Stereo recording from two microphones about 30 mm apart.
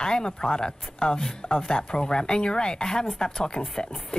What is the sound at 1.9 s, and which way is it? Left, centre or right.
Speech, left.